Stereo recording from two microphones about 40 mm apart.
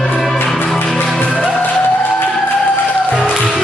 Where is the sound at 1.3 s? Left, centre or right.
Right.